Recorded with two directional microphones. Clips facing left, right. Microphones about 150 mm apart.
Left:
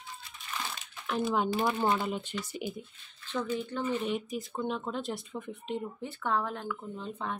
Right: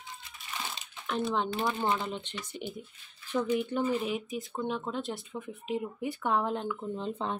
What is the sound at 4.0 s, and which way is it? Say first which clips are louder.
Speech: even; centre (ahead or behind).